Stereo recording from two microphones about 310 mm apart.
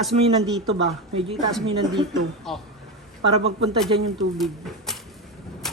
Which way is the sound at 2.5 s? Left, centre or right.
Centre.